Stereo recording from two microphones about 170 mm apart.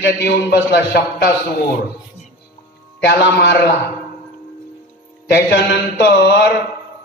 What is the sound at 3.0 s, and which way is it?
Speech, 75° left (ahead or behind).